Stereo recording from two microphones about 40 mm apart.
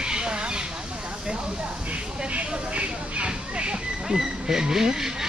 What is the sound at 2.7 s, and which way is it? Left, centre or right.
Speech, right.